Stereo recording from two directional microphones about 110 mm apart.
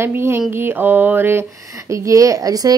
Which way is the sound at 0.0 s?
20° right (ahead or behind).